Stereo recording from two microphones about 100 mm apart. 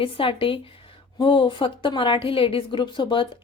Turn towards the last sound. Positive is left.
turn(degrees=55)  # may be behind; listen again after turning